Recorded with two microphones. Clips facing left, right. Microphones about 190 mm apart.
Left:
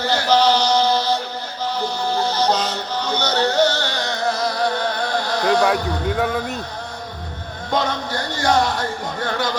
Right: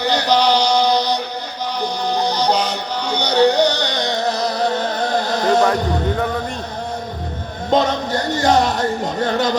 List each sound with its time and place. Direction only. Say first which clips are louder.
0.0 s chant: right 1 dB; 15° right (ahead or behind)
1.8 s music: right 2 dB; 15° right (ahead or behind)
5.6 s speech: right 2 dB; 5° left (ahead or behind)
7.7 s music: right 5 dB; 20° right (ahead or behind)